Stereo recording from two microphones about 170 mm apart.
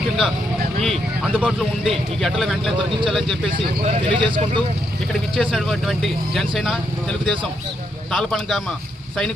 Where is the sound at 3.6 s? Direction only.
35° right (ahead or behind).